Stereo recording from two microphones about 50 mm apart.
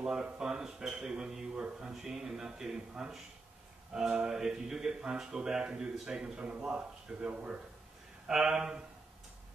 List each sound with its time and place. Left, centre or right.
0.0 s a man's voice: centre